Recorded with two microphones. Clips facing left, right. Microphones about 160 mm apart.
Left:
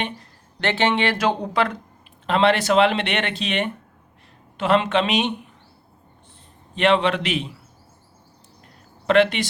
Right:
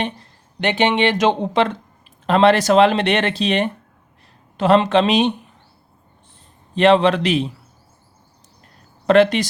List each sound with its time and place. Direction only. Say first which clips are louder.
0.6 s speech: right 3 dB; 15° right (ahead or behind)
2.2 s speech: right 5 dB; 40° right (ahead or behind)
6.7 s speech: right 5 dB; 35° right (ahead or behind)
9.0 s speech: right 4 dB; 40° right (ahead or behind)